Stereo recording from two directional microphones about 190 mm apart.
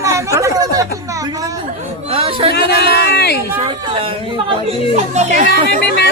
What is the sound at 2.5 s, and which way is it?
Speech, 55° left (ahead or behind).